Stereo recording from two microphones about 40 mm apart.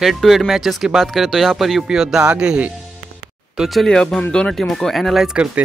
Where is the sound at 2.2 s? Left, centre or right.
Right.